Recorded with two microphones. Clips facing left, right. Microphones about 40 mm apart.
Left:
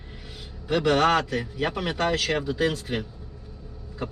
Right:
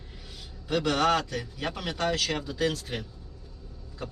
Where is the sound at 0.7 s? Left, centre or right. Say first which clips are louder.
Left 4 dB; left.